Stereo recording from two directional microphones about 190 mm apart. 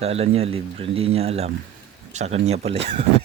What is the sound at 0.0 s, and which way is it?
Speech, 35° right (ahead or behind).